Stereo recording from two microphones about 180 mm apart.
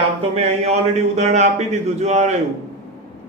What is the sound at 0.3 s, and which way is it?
A man's voice, 40° right (ahead or behind).